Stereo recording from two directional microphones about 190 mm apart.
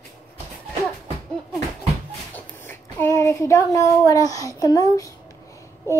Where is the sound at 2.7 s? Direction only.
10° left (ahead or behind).